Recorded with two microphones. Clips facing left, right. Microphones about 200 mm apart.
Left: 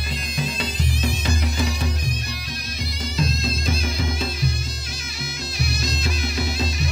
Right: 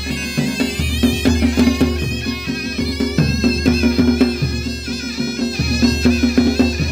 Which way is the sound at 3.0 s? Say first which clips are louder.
Right 10 dB; 65° right (ahead or behind).